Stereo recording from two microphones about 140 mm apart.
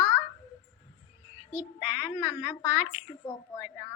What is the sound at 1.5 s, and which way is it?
A woman's voice, 15° right (ahead or behind).